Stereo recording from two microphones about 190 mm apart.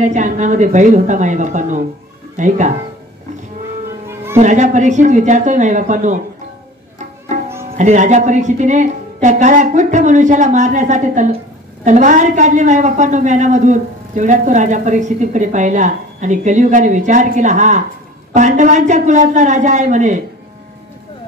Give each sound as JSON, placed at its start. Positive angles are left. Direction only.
{"t": 0.0, "sound": "a woman's voice", "side_deg": -40}
{"t": 4.1, "sound": "music", "side_deg": -15}
{"t": 4.4, "sound": "a woman's voice", "side_deg": -40}
{"t": 7.7, "sound": "a woman's voice", "side_deg": -40}